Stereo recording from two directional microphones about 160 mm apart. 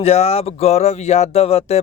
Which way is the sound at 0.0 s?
40° left (ahead or behind).